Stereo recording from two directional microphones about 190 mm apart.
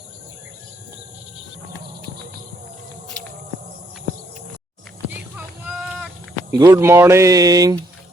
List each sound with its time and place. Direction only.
5.6 s sheep: 5° right (ahead or behind)
6.5 s speech: 15° right (ahead or behind)